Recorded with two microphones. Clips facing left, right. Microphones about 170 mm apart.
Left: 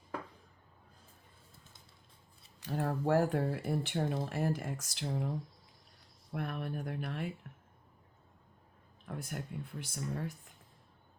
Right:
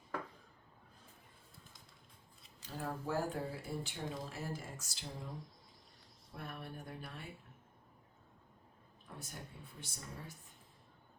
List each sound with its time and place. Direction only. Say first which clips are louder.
2.6 s speech: left 9 dB; 70° left (ahead or behind)
6.3 s speech: left 9 dB; 75° left (ahead or behind)
9.0 s speech: left 9 dB; 75° left (ahead or behind)